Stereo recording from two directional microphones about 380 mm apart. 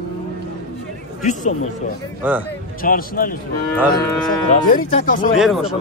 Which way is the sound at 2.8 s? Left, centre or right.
Left.